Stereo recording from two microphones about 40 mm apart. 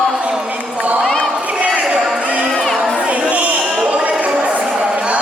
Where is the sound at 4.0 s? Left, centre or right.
Right.